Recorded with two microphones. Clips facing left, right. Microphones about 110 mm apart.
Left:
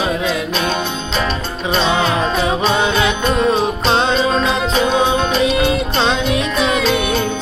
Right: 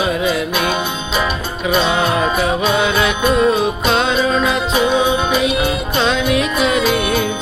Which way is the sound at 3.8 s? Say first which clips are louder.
Left 1 dB; 30° left (ahead or behind).